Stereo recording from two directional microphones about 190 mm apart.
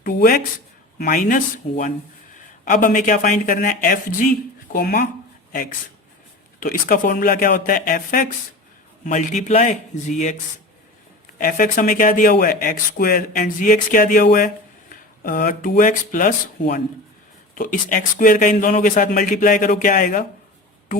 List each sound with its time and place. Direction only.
0.0 s speech: 55° left (ahead or behind)
6.6 s speech: 45° left (ahead or behind)
11.3 s speech: 45° left (ahead or behind)